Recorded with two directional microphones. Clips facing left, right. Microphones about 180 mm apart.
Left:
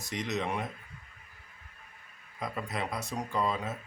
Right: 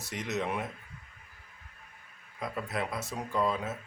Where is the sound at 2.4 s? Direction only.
5° right (ahead or behind).